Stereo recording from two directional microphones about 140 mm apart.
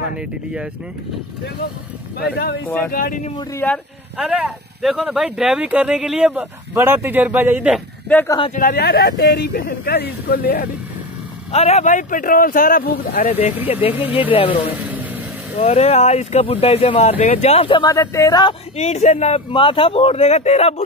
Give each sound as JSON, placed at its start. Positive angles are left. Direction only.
{"t": 2.9, "sound": "speech", "side_deg": 80}
{"t": 3.5, "sound": "speech", "side_deg": 10}
{"t": 4.2, "sound": "speech", "side_deg": -10}
{"t": 8.1, "sound": "speech", "side_deg": 10}
{"t": 8.5, "sound": "speech", "side_deg": 90}
{"t": 11.5, "sound": "speech", "side_deg": 50}
{"t": 13.2, "sound": "speech", "side_deg": 50}
{"t": 14.8, "sound": "vehicle", "side_deg": -10}
{"t": 15.5, "sound": "speech", "side_deg": 50}
{"t": 17.8, "sound": "speech", "side_deg": 25}
{"t": 18.8, "sound": "speech", "side_deg": 50}
{"t": 19.5, "sound": "speech", "side_deg": 35}